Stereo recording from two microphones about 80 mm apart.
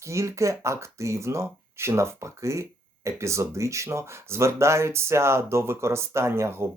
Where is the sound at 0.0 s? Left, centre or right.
Right.